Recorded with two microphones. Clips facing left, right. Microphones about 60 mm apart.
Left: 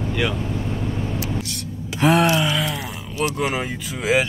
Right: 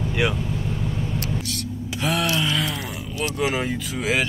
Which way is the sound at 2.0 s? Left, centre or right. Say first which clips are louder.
Left 7 dB; left.